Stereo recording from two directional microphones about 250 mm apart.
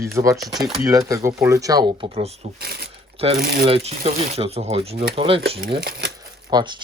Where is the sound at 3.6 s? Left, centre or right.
Right.